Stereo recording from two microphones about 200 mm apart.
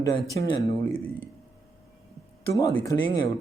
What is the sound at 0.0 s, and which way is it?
Speech, 20° left (ahead or behind).